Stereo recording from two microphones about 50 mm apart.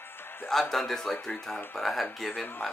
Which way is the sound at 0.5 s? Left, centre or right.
Centre.